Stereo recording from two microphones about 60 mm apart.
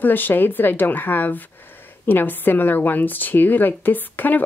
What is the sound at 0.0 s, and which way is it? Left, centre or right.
A woman's voice, left.